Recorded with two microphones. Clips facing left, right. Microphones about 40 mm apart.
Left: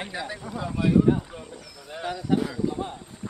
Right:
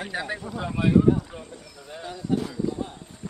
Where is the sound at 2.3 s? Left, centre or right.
Left.